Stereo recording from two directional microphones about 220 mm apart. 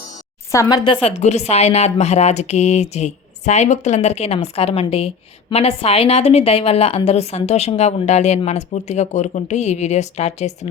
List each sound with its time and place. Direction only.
0.5 s speech: 15° left (ahead or behind)
1.0 s speech: 30° left (ahead or behind)